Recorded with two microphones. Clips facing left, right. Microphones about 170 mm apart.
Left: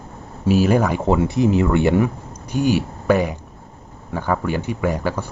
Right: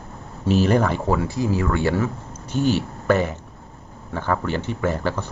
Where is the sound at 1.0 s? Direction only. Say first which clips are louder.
Left 5 dB; 20° left (ahead or behind).